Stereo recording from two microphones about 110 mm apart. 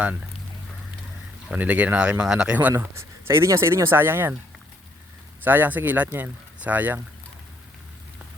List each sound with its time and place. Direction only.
1.5 s speech: 15° right (ahead or behind)
5.4 s speech: 15° right (ahead or behind)